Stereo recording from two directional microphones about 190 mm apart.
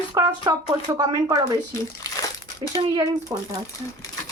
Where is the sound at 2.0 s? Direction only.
20° left (ahead or behind).